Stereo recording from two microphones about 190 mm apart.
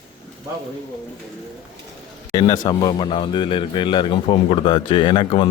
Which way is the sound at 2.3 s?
20° left (ahead or behind).